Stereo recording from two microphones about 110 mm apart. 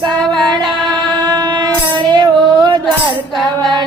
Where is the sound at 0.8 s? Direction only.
40° right (ahead or behind).